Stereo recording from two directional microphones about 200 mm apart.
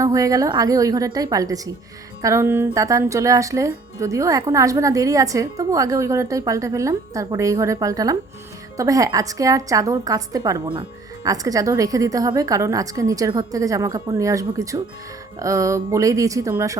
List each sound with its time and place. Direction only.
0.0 s a woman's voice: 15° right (ahead or behind)